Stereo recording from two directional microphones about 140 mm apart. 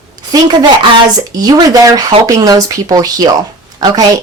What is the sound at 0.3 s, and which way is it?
A woman's voice, 30° right (ahead or behind).